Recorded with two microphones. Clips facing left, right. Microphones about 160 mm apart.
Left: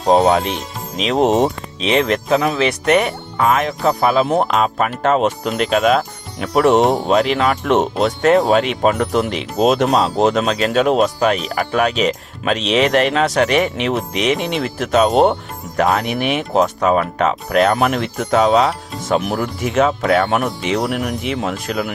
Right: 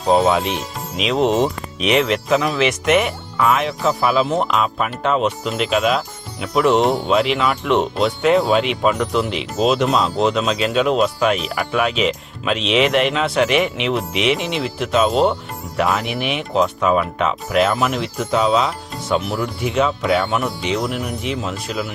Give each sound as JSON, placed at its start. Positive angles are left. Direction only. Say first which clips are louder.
{"t": 0.1, "sound": "speech", "louder": "left 2 dB", "side_deg": 40}
{"t": 0.4, "sound": "speech", "louder": "even", "side_deg": 0}
{"t": 1.0, "sound": "speech", "louder": "left 2 dB", "side_deg": 45}
{"t": 1.5, "sound": "speech", "louder": "even", "side_deg": 25}
{"t": 2.0, "sound": "speech", "louder": "left 2 dB", "side_deg": 40}